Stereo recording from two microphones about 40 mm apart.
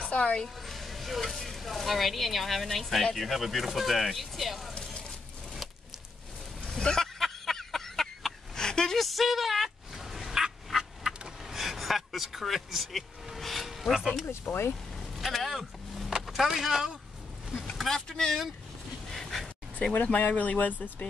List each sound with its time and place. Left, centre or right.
0.0 s speech: left
0.7 s speech: centre
6.7 s a sound: centre
7.2 s a sound: centre
8.9 s duck: centre
11.5 s vehicle: centre
14.2 s speech: left
15.1 s vehicle: centre
16.1 s speech: centre
17.7 s speech: centre
19.1 s dog: centre
20.2 s speech: left